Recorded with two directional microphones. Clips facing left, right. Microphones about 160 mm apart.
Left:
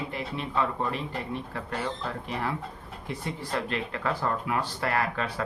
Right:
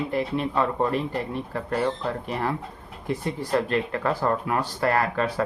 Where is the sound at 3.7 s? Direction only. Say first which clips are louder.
Right 5 dB; 45° right (ahead or behind).